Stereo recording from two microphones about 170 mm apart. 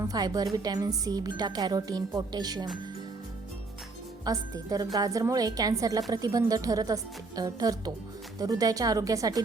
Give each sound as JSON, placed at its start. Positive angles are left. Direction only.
{"t": 0.0, "sound": "a woman's voice", "side_deg": -20}
{"t": 4.3, "sound": "a woman's voice", "side_deg": -20}